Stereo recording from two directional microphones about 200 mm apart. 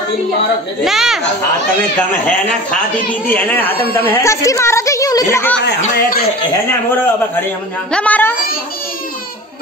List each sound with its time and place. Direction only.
0.8 s speech: centre (ahead or behind)
2.2 s a woman's voice: 10° left (ahead or behind)
5.8 s a man's voice: 45° left (ahead or behind)
7.9 s a woman's voice: 5° left (ahead or behind)